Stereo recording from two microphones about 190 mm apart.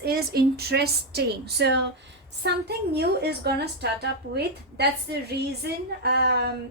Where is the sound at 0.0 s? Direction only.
55° right (ahead or behind).